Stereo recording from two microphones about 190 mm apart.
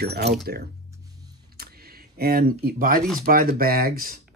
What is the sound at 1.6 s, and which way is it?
Computer keyboard, 55° right (ahead or behind).